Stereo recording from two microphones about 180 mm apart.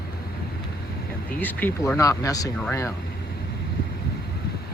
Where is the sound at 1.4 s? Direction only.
10° left (ahead or behind).